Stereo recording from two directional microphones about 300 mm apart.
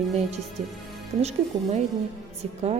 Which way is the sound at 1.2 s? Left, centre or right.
Right.